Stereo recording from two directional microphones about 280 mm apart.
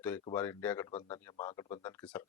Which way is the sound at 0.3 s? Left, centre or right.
Centre.